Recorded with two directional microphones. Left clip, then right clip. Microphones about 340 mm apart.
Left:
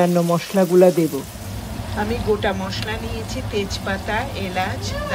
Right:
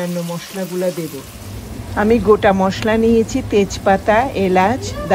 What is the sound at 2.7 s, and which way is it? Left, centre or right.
Speech, centre.